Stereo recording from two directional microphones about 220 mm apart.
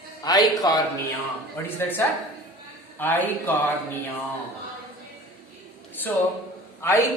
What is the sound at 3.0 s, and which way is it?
Speech, 10° left (ahead or behind).